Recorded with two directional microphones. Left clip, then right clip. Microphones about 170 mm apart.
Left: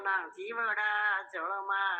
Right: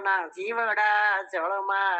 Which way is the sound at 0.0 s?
40° right (ahead or behind).